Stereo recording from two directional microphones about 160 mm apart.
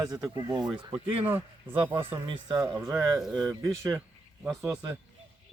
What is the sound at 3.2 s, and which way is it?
Speech, 5° right (ahead or behind).